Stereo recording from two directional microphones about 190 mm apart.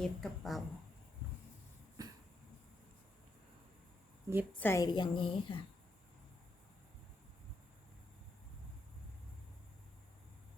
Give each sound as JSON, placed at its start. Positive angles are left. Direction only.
{"t": 0.0, "sound": "a woman's voice", "side_deg": 0}
{"t": 2.0, "sound": "a sound", "side_deg": -20}
{"t": 4.3, "sound": "a woman's voice", "side_deg": -15}
{"t": 4.6, "sound": "a woman's voice", "side_deg": 15}